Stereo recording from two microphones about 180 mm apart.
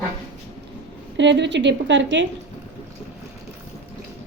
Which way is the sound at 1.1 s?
80° right.